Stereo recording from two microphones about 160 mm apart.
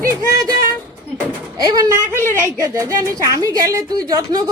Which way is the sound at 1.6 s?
25° right (ahead or behind).